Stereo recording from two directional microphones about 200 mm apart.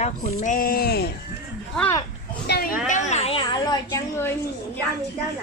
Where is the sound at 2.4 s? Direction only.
55° left (ahead or behind).